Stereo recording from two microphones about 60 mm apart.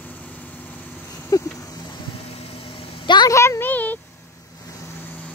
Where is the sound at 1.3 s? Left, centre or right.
Left.